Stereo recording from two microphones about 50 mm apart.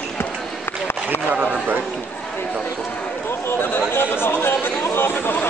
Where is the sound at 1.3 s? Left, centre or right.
Right.